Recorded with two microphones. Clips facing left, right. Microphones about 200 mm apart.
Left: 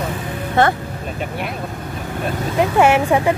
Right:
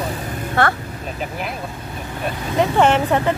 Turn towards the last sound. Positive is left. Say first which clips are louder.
# left 2 dB
turn(degrees=10)  # may be behind; listen again after turning